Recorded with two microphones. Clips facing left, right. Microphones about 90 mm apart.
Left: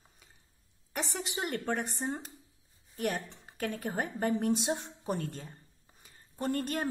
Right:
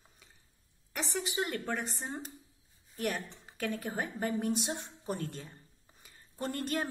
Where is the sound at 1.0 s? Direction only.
20° left (ahead or behind).